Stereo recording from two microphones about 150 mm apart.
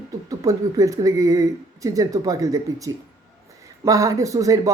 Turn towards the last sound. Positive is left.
turn(degrees=-25)  # may be behind; listen again after turning